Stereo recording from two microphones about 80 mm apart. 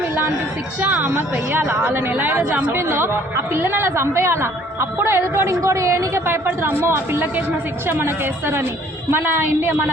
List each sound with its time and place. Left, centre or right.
0.8 s a woman's voice: right